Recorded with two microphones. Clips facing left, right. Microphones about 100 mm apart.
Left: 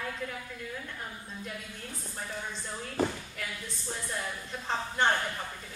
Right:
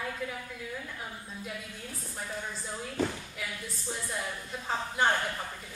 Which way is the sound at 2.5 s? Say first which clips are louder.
Right 1 dB; 5° right (ahead or behind).